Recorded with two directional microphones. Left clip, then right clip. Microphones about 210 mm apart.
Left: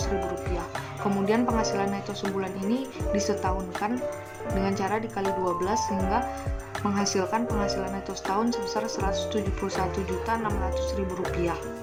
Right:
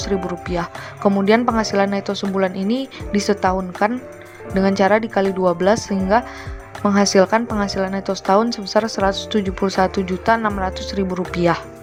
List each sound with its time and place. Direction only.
1.2 s speech: 35° right (ahead or behind)